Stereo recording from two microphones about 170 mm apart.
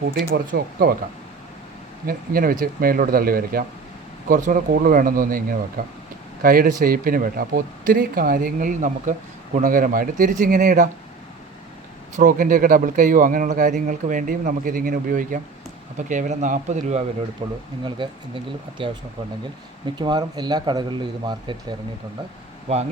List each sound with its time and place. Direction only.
0.0 s speech: 60° right (ahead or behind)
2.0 s speech: 60° right (ahead or behind)
12.1 s speech: 50° right (ahead or behind)
17.4 s speech: 30° right (ahead or behind)